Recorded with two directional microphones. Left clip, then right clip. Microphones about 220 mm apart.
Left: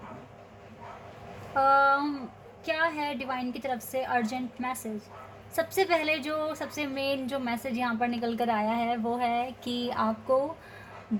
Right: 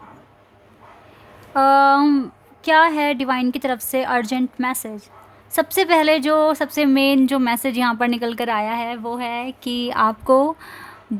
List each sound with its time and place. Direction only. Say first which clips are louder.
1.5 s a woman's voice: right 9 dB; 45° right (ahead or behind)